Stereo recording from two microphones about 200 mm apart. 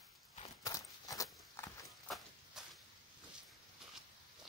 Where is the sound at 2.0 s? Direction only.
Centre (ahead or behind).